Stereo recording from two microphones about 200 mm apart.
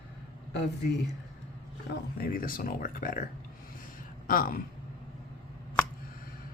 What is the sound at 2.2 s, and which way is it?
Speech, 45° left (ahead or behind).